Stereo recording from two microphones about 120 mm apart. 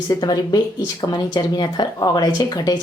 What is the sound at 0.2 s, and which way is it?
Speech, 35° left (ahead or behind).